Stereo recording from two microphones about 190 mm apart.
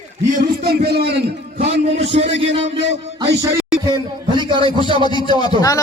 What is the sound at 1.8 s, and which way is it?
Music, 35° right (ahead or behind).